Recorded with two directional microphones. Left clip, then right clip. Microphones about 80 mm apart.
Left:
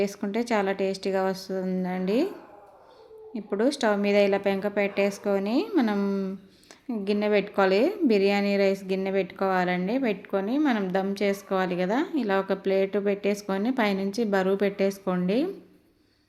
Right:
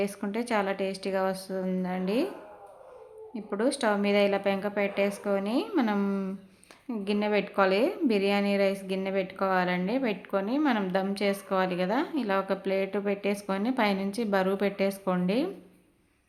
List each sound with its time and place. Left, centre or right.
0.0 s a woman's voice: left
3.3 s a woman's voice: left
5.6 s a woman's voice: left
6.8 s a woman's voice: left